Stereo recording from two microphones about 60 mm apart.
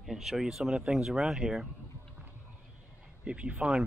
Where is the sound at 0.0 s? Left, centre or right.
Centre.